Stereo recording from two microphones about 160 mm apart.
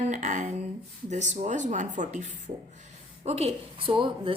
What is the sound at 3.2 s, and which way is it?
A woman's voice, 40° right (ahead or behind).